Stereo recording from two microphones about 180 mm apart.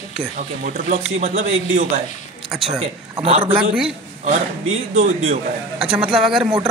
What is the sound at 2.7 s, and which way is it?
Speech, 35° right (ahead or behind).